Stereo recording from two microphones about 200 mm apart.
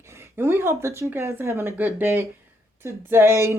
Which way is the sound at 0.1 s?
10° right (ahead or behind).